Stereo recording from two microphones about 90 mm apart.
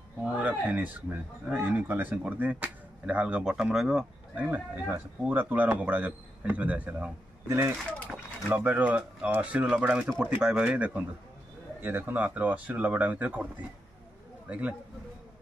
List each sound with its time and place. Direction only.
0.2 s speech: 15° right (ahead or behind)
4.5 s speech: 20° right (ahead or behind)
7.4 s speech: 30° right (ahead or behind)
8.5 s speech: 20° right (ahead or behind)